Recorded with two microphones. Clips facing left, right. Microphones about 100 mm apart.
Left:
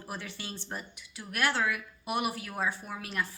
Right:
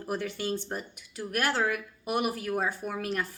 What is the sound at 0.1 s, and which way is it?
A woman's voice, 50° right (ahead or behind).